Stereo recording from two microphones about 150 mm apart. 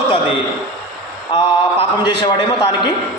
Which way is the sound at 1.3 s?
35° left (ahead or behind).